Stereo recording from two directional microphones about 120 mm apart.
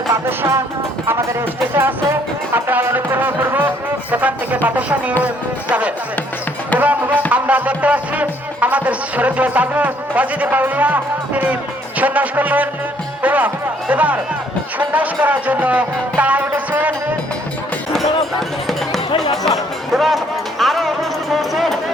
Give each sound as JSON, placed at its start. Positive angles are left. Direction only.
{"t": 0.1, "sound": "music", "side_deg": -20}
{"t": 2.6, "sound": "music", "side_deg": -15}
{"t": 4.1, "sound": "speech", "side_deg": -15}
{"t": 6.7, "sound": "music", "side_deg": -15}
{"t": 11.9, "sound": "speech", "side_deg": -15}
{"t": 19.5, "sound": "music", "side_deg": 0}